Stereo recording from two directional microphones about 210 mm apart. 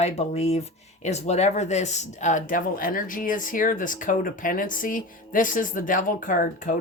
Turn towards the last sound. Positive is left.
turn(degrees=40)  # may be behind; listen again after turning